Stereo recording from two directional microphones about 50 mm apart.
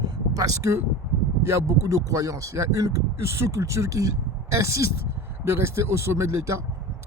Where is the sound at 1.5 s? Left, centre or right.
Right.